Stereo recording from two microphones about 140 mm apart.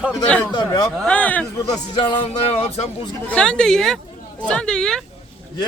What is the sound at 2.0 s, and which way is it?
Speech, 40° left (ahead or behind).